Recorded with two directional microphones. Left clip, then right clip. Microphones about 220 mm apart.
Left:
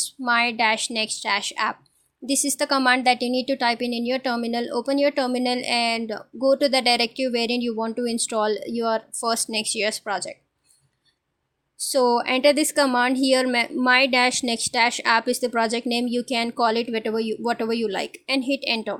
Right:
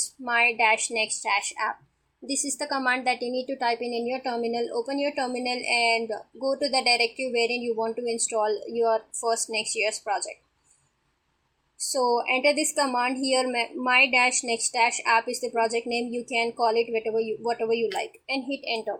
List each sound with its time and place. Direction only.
0.3 s a woman's voice: 55° left (ahead or behind)
11.8 s speech: 50° left (ahead or behind)